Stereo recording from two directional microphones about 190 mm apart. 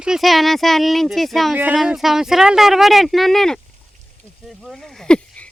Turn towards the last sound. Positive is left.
turn(degrees=5)  # may be behind; listen again after turning